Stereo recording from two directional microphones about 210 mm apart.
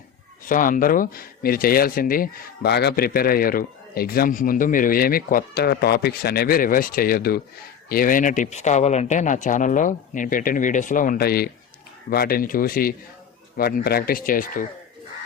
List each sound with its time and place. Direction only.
0.4 s speech: 40° left (ahead or behind)